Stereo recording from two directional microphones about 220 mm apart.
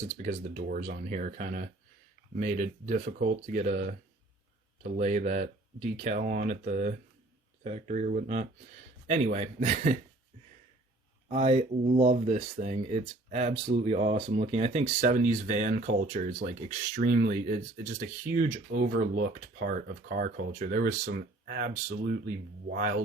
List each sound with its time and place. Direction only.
0.1 s speech: 30° right (ahead or behind)
11.3 s speech: 25° right (ahead or behind)